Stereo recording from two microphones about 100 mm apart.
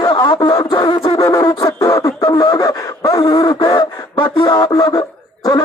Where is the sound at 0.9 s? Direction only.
35° left (ahead or behind).